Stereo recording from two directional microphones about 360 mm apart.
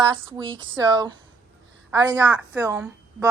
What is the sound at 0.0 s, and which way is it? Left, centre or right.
A woman's voice, centre.